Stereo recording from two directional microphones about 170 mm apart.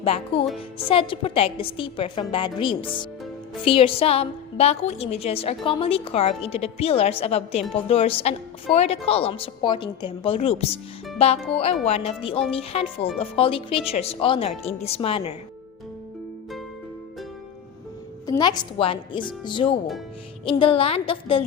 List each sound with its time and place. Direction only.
0.0 s a woman's voice: 35° left (ahead or behind)
0.4 s music: centre (ahead or behind)
0.9 s a woman's voice: 30° left (ahead or behind)
18.3 s a woman's voice: 25° left (ahead or behind)